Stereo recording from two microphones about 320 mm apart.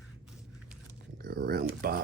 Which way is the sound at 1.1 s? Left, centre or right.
Right.